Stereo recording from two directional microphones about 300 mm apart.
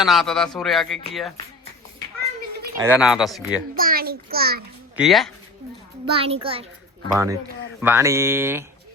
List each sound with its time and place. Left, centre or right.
0.0 s speech: centre
2.8 s speech: centre
3.8 s a child's voice: right
4.9 s speech: centre
6.1 s a child's voice: centre